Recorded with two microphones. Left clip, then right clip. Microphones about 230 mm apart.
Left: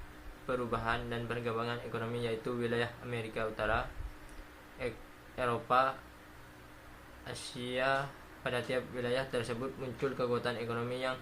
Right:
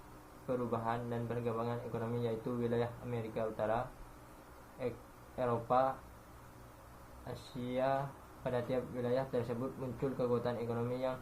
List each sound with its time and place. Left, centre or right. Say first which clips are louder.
0.4 s a man's voice: left 2 dB; left
5.4 s a man's voice: left 2 dB; left
7.3 s a man's voice: left 3 dB; left